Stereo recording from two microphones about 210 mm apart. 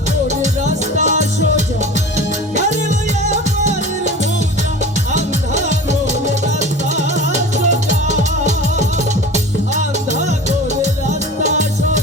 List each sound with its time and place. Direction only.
0.3 s music: 35° right (ahead or behind)
5.1 s music: 35° right (ahead or behind)
9.3 s music: 35° right (ahead or behind)